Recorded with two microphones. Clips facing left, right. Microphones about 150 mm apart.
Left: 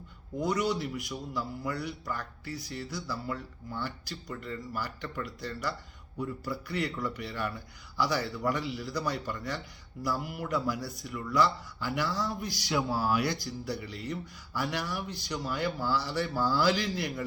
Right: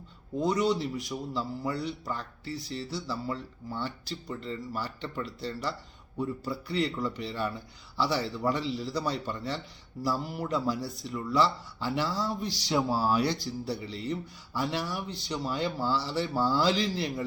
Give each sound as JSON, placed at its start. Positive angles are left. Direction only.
{"t": 0.3, "sound": "speech", "side_deg": -25}